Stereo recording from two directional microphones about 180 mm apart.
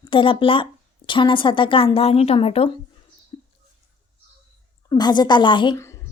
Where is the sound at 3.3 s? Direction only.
25° left (ahead or behind).